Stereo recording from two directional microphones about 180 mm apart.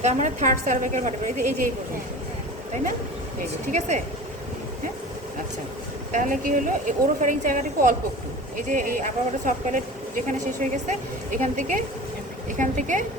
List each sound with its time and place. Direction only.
0.0 s a woman's voice: 40° right (ahead or behind)
3.7 s speech: 40° right (ahead or behind)
6.1 s a woman's voice: 45° right (ahead or behind)